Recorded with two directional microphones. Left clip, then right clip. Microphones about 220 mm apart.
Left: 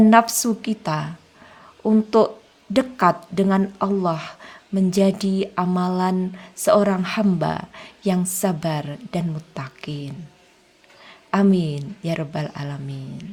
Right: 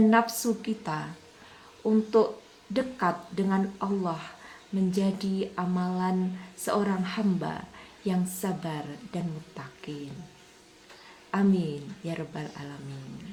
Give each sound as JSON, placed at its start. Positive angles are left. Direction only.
{"t": 0.1, "sound": "a woman's voice", "side_deg": 50}
{"t": 11.3, "sound": "a woman's voice", "side_deg": 45}